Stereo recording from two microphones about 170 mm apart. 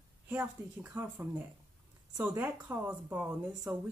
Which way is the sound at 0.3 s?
10° right (ahead or behind).